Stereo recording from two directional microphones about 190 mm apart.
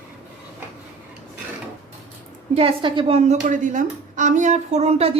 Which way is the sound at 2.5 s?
30° right (ahead or behind).